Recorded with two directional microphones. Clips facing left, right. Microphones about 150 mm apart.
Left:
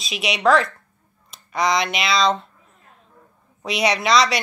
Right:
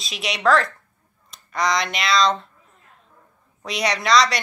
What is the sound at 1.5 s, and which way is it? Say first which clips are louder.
Speech: left 2 dB; 25° left (ahead or behind).